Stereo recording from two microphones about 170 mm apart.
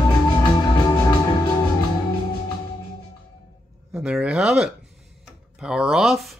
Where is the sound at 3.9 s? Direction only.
5° right (ahead or behind).